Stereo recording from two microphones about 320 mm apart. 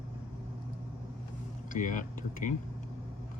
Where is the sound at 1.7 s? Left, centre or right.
Left.